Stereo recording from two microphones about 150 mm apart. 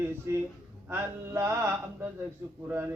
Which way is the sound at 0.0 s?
15° right (ahead or behind).